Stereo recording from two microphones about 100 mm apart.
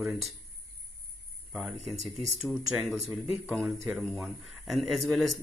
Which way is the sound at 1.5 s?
5° right (ahead or behind).